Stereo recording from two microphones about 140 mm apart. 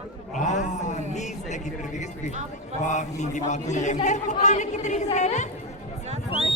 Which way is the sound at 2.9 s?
60° left (ahead or behind).